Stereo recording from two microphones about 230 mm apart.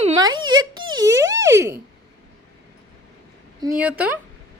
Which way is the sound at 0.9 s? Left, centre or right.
Centre.